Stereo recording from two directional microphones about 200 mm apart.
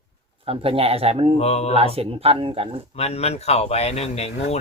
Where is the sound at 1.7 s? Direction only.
30° right (ahead or behind).